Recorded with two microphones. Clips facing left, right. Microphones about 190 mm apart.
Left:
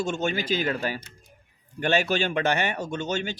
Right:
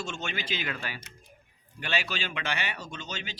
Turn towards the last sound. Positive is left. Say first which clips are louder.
# left 11 dB
turn(degrees=50)  # may be behind; listen again after turning